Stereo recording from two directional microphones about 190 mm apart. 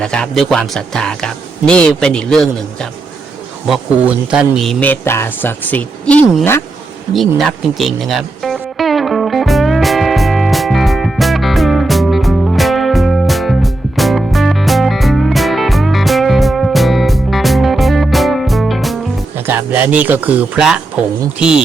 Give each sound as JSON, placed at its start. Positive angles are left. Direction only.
{"t": 0.0, "sound": "speech", "side_deg": 5}
{"t": 3.7, "sound": "speech", "side_deg": -5}
{"t": 7.1, "sound": "music", "side_deg": 0}
{"t": 19.5, "sound": "speech", "side_deg": -10}